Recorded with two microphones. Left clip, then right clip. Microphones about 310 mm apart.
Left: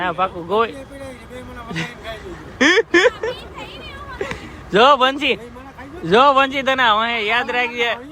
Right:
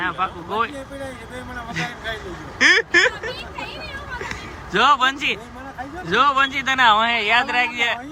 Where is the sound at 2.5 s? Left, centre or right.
Centre.